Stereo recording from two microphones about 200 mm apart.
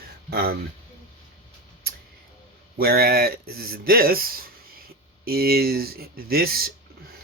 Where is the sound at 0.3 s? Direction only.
50° right (ahead or behind).